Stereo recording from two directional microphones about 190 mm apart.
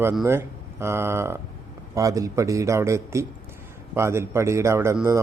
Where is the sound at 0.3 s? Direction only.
15° right (ahead or behind).